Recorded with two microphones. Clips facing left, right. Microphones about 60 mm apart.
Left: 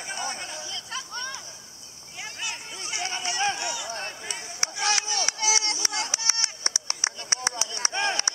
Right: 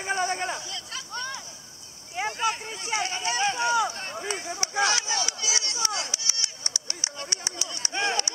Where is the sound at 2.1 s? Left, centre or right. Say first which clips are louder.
Right 10 dB; right.